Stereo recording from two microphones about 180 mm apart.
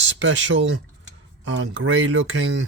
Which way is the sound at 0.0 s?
90° right.